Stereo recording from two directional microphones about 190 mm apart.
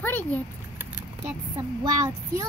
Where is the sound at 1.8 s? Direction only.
15° right (ahead or behind).